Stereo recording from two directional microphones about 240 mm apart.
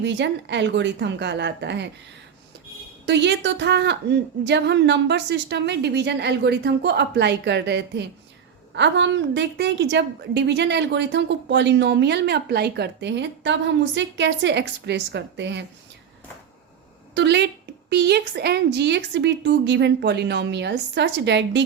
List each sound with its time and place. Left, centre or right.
0.0 s a woman's voice: right
3.1 s a woman's voice: right
17.2 s a woman's voice: right